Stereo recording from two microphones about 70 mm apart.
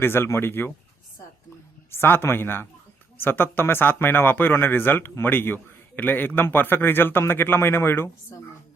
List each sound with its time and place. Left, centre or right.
0.0 s a man's voice: left
1.9 s a man's voice: left